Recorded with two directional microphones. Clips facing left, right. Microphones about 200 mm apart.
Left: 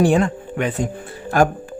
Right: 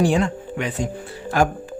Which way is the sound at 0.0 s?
55° left (ahead or behind).